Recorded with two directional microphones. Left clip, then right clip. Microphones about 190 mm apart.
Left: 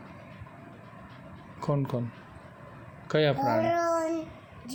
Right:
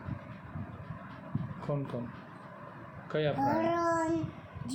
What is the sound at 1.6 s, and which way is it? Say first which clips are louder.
Speech: left 7 dB; 45° left (ahead or behind).